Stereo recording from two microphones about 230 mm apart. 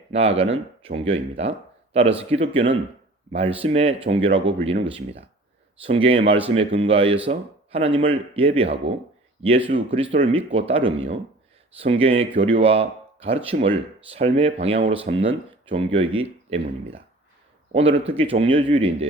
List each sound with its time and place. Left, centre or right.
0.1 s speech: right
5.8 s speech: right